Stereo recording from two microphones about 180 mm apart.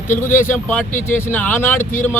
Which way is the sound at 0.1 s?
45° left (ahead or behind).